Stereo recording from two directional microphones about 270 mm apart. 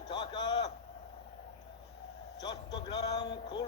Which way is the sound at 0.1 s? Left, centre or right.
Centre.